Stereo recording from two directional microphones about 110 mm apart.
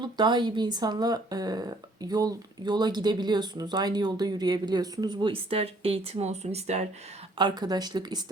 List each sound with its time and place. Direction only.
0.0 s speech: 40° right (ahead or behind); by 6.8 s 75° right (ahead or behind)
7.3 s speech: 40° right (ahead or behind)